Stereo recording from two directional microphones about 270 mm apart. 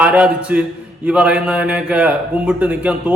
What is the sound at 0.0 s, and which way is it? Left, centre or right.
A man's voice, centre.